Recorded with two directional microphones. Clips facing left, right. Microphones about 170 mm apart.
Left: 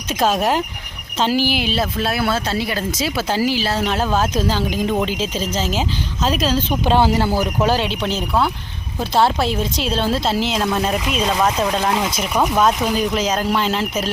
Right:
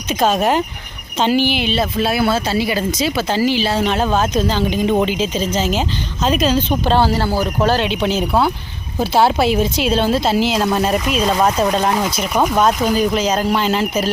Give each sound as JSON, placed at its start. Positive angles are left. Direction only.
{"t": 0.1, "sound": "speech", "side_deg": 0}
{"t": 6.8, "sound": "speech", "side_deg": 15}
{"t": 7.6, "sound": "speech", "side_deg": 5}